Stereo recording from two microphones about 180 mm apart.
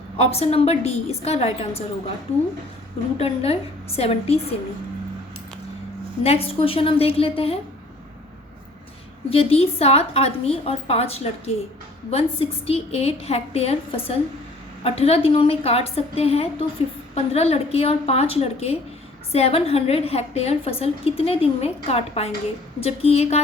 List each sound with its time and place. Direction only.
0.2 s a woman's voice: 35° left (ahead or behind)
3.2 s a woman's voice: 35° left (ahead or behind)
6.2 s a woman's voice: 35° left (ahead or behind)
9.3 s a woman's voice: 30° left (ahead or behind)